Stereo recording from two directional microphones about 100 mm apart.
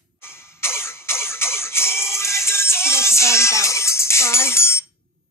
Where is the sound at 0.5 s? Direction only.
25° left (ahead or behind).